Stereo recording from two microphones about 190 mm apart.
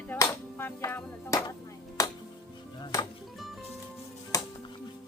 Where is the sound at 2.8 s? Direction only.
25° left (ahead or behind).